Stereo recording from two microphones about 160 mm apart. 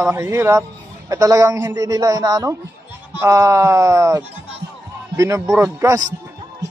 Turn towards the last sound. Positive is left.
turn(degrees=-20)  # may be behind; listen again after turning